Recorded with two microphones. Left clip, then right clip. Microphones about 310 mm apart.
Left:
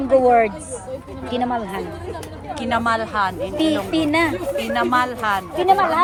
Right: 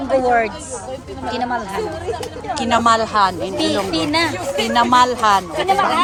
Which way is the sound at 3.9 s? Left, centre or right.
Left.